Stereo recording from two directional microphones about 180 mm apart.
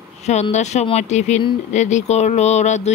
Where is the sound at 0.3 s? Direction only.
40° left (ahead or behind).